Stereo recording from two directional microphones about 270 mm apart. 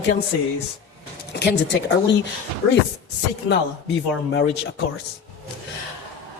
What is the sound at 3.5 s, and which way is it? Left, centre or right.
A man's voice, left.